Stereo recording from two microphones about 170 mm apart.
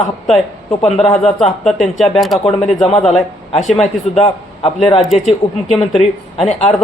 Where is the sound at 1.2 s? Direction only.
Centre (ahead or behind).